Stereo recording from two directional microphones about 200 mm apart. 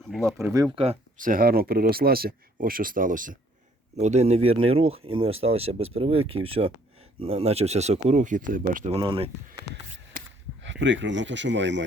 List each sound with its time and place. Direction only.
0.1 s speech: centre (ahead or behind)
0.4 s speech: 15° right (ahead or behind)
1.2 s speech: 45° right (ahead or behind); by 6.2 s 30° right (ahead or behind)
6.2 s speech: 90° right
7.2 s speech: 30° right (ahead or behind)
10.6 s speech: 65° right (ahead or behind)